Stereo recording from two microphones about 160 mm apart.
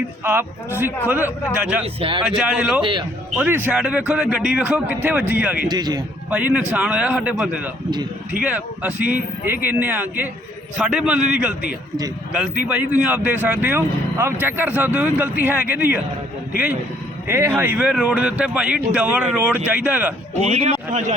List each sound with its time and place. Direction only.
0.3 s speech: 15° right (ahead or behind)
1.8 s a man's voice: 35° right (ahead or behind)
2.2 s speech: 5° right (ahead or behind)
2.8 s speech: 30° right (ahead or behind)
3.3 s speech: 10° right (ahead or behind)
5.6 s speech: 25° right (ahead or behind)
6.3 s speech: 10° right (ahead or behind)
12.6 s speech: 10° right (ahead or behind)
17.2 s speech: 15° right (ahead or behind)
20.4 s speech: 45° right (ahead or behind)